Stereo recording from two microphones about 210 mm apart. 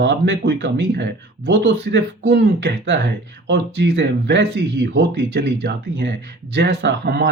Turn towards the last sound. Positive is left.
turn(degrees=-50)  # may be behind; listen again after turning